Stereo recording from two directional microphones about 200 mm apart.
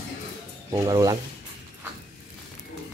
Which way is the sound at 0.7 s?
15° right (ahead or behind).